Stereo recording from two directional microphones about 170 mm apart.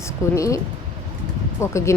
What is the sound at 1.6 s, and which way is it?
Speech, 15° left (ahead or behind).